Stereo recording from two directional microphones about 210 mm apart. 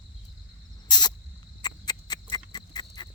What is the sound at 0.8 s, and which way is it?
Rodents, 20° left (ahead or behind).